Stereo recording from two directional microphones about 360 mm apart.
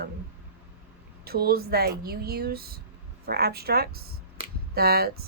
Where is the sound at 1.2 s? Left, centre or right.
Right.